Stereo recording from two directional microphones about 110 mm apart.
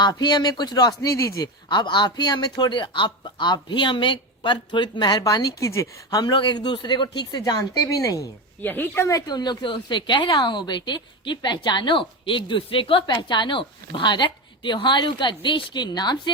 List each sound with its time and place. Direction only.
0.0 s speech: 40° left (ahead or behind)
1.7 s speech: 45° left (ahead or behind)
8.6 s speech: 20° left (ahead or behind)
9.0 s a woman's voice: 35° left (ahead or behind)